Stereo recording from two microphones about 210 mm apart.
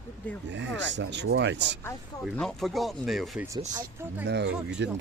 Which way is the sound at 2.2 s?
Centre (ahead or behind).